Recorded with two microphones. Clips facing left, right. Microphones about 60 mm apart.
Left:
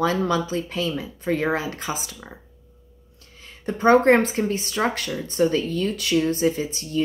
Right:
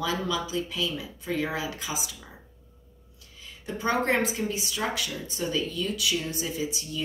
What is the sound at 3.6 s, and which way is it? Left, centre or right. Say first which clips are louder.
Speech: left 10 dB; left.